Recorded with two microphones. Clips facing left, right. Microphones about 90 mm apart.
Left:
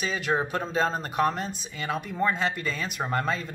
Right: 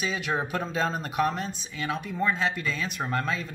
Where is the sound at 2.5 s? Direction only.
45° left (ahead or behind).